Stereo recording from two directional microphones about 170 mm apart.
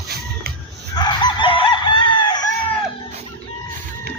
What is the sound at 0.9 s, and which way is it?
Chicken, 25° left (ahead or behind).